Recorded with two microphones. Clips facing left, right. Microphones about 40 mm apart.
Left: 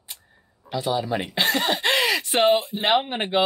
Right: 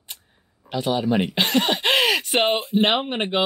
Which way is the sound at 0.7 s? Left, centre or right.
Centre.